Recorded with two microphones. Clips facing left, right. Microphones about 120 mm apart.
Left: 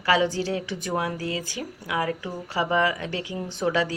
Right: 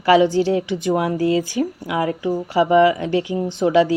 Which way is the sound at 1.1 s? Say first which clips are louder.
Right 12 dB; 35° right (ahead or behind).